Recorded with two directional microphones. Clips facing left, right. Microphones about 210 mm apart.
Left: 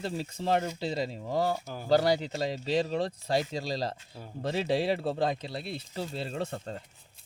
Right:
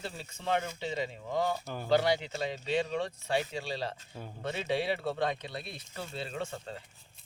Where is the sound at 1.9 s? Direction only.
40° left (ahead or behind).